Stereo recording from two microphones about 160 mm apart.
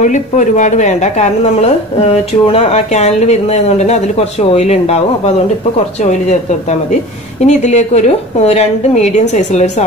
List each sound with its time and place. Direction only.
0.0 s speech: 50° left (ahead or behind)
6.7 s speech: 45° left (ahead or behind)